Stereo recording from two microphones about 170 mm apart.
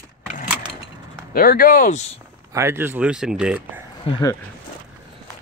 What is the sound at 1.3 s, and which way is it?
Speech, 55° left (ahead or behind).